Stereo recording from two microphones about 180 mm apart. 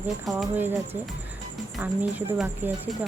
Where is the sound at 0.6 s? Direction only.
10° right (ahead or behind).